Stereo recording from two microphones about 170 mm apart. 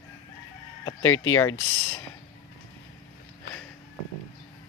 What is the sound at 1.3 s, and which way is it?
Speech, 20° left (ahead or behind).